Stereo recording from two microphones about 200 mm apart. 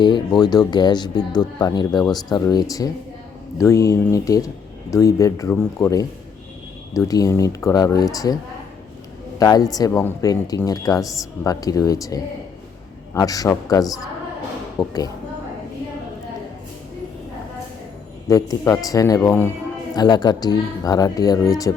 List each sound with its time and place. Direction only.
0.0 s speech: 20° left (ahead or behind)
9.4 s speech: 20° left (ahead or behind)
18.3 s speech: 15° left (ahead or behind)